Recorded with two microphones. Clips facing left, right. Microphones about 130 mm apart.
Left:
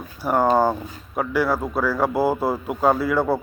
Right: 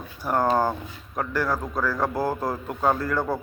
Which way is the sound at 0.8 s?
40° left (ahead or behind).